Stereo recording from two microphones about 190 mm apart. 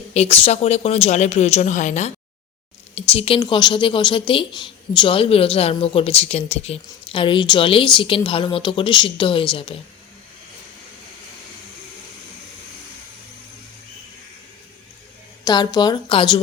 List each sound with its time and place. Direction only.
0.1 s a woman's voice: 35° left (ahead or behind)
15.4 s a woman's voice: 20° left (ahead or behind)